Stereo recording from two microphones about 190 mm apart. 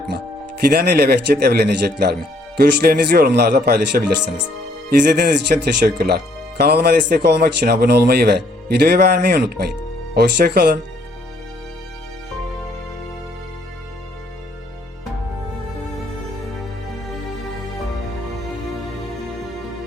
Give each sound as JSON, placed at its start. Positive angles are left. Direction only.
{"t": 0.7, "sound": "speech", "side_deg": -55}